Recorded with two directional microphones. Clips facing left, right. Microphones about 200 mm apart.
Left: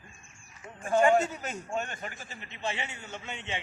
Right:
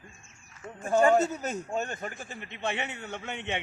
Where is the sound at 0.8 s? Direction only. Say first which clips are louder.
Right 1 dB; 40° right (ahead or behind).